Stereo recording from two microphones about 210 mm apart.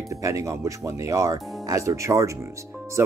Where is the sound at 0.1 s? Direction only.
15° right (ahead or behind).